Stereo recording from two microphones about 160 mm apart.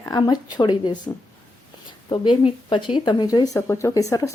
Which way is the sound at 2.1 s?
30° left (ahead or behind).